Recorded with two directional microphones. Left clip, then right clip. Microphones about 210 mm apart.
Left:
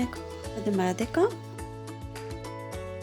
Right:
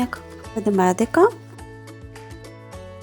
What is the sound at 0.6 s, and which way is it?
Speech, 20° right (ahead or behind).